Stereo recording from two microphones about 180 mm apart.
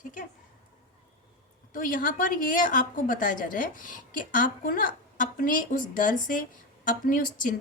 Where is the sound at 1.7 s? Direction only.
50° left (ahead or behind).